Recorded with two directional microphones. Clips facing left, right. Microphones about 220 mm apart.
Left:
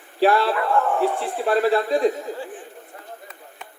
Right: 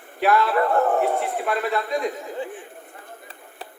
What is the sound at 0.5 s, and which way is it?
Speech, 40° right (ahead or behind).